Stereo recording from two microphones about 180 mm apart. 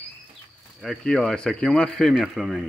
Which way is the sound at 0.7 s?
Centre (ahead or behind).